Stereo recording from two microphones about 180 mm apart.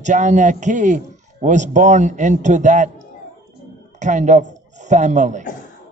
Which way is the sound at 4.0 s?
40° right (ahead or behind).